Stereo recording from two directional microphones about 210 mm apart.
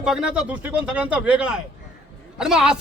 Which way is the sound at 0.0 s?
5° right (ahead or behind).